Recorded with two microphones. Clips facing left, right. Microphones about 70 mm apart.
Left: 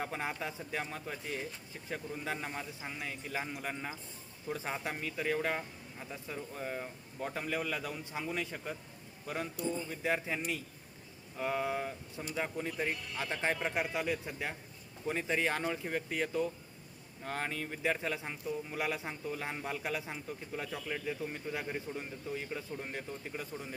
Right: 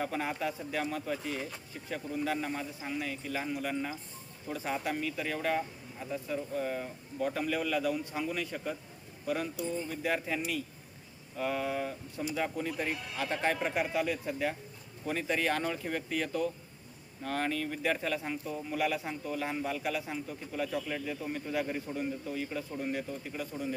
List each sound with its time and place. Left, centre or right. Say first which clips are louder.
0.0 s speech: right 4 dB; centre
12.7 s a man's voice: right 1 dB; centre
13.1 s speech: right 4 dB; centre